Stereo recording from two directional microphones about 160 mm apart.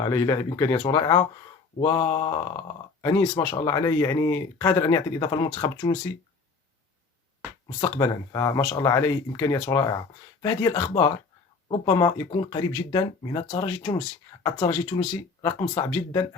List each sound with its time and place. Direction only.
0.0 s speech: 20° left (ahead or behind)
7.8 s speech: 20° left (ahead or behind)